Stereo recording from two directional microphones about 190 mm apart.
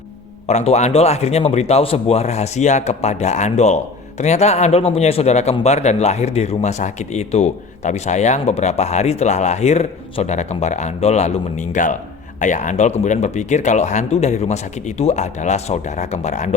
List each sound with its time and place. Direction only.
0.4 s speech: 35° left (ahead or behind)